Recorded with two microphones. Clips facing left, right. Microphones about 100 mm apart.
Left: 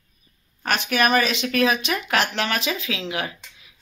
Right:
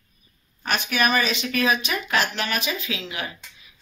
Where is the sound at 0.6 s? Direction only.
65° left (ahead or behind); by 3.3 s 85° left.